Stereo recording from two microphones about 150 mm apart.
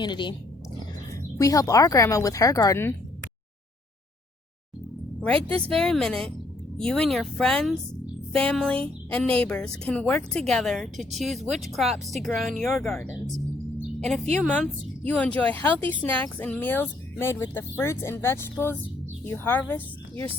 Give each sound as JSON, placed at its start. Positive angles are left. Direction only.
{"t": 0.0, "sound": "speech", "side_deg": 30}
{"t": 5.5, "sound": "speech", "side_deg": 5}
{"t": 14.3, "sound": "speech", "side_deg": 10}